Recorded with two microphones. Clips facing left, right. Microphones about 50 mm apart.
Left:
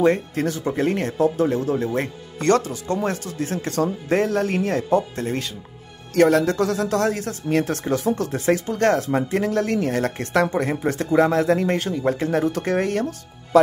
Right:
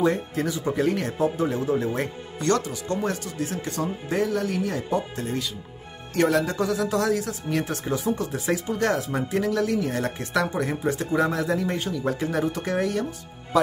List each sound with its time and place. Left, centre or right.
0.0 s speech: left
6.1 s speech: left
11.9 s speech: left